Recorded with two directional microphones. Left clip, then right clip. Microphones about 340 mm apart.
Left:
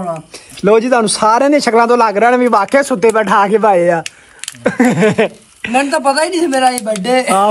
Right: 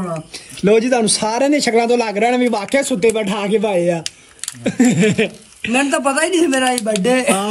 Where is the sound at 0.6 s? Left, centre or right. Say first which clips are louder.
Left 4 dB; left.